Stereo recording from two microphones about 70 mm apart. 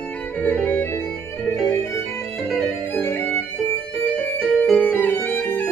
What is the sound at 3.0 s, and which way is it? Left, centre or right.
Music, left.